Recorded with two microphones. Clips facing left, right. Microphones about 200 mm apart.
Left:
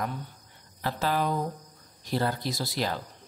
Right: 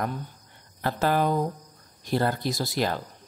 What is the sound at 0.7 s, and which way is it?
Speech, 50° right (ahead or behind).